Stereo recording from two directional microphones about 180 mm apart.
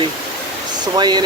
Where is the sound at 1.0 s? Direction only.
25° right (ahead or behind).